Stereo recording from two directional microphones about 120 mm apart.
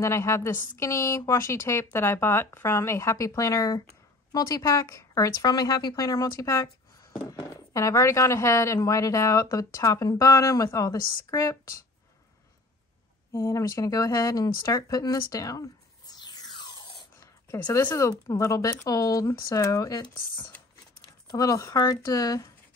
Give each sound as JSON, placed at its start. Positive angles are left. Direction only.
{"t": 0.0, "sound": "a woman's voice", "side_deg": 25}
{"t": 13.3, "sound": "a woman's voice", "side_deg": 25}